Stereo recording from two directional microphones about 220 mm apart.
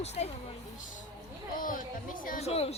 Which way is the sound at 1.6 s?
40° left (ahead or behind).